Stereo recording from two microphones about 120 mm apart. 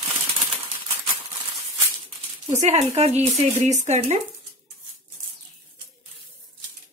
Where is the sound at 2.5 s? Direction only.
65° right (ahead or behind).